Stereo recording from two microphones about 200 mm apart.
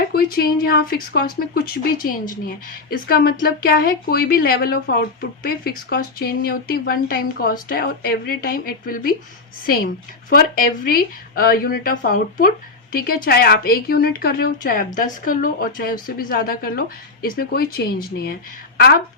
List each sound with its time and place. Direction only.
0.1 s speech: 45° left (ahead or behind)